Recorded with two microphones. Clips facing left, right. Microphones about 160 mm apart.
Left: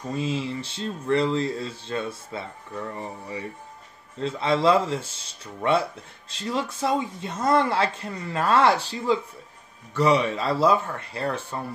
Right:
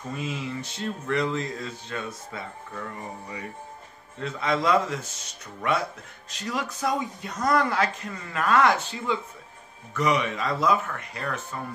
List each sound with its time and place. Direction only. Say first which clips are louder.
0.1 s speech: left 5 dB; 30° left (ahead or behind)